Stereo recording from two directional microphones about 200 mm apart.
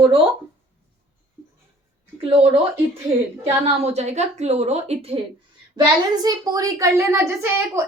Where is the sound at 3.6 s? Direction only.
30° right (ahead or behind).